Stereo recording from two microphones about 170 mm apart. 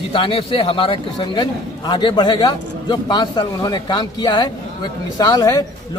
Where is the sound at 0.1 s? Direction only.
30° left (ahead or behind).